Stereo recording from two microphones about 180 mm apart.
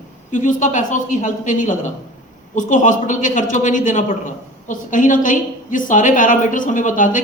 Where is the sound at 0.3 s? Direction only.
45° left (ahead or behind).